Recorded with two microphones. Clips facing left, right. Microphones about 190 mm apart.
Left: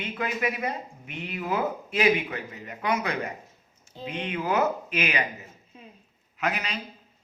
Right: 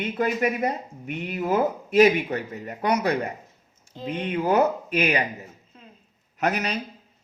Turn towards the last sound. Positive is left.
turn(degrees=-40)  # may be behind; listen again after turning